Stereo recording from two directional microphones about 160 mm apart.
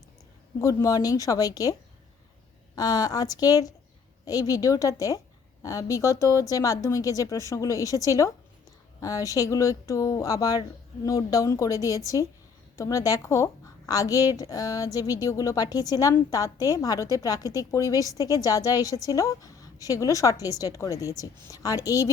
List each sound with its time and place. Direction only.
0.6 s a woman's voice: 20° left (ahead or behind)
2.7 s a woman's voice: 25° left (ahead or behind)